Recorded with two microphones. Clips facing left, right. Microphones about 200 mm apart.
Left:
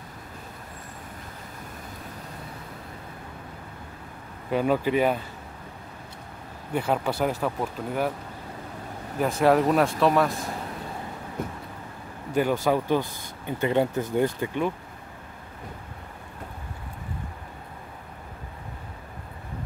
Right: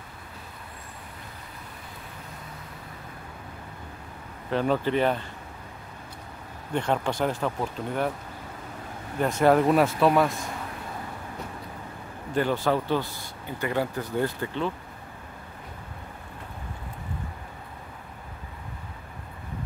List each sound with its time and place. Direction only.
4.5 s speech: 10° left (ahead or behind)
6.7 s speech: 5° left (ahead or behind)
9.2 s speech: centre (ahead or behind)
12.6 s speech: 15° left (ahead or behind)